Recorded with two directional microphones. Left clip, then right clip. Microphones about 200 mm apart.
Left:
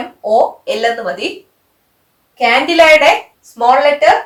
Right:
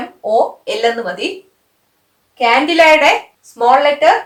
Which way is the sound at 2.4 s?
15° right (ahead or behind).